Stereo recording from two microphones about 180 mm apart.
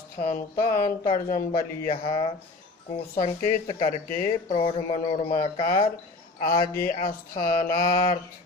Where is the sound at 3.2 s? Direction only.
45° left (ahead or behind).